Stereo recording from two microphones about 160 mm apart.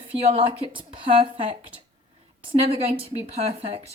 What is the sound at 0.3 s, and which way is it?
Speech, 35° right (ahead or behind).